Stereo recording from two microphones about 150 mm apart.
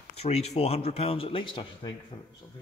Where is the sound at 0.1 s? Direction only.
45° left (ahead or behind).